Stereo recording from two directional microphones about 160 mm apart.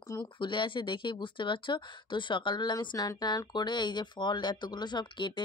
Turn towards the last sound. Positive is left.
turn(degrees=30)  # may be behind; listen again after turning